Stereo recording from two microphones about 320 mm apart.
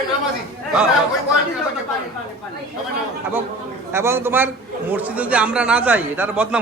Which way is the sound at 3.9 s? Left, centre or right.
Centre.